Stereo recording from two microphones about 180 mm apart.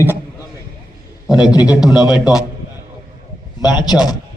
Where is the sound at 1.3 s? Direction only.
5° right (ahead or behind).